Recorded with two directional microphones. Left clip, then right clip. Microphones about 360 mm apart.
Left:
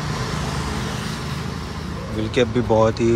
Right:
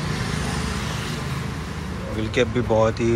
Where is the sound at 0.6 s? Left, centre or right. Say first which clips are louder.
Left 1 dB; left.